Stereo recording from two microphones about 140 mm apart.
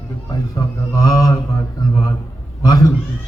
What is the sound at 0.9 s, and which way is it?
Speech, 25° left (ahead or behind).